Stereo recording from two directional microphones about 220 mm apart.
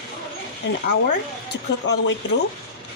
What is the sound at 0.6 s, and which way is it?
Speech, 55° left (ahead or behind).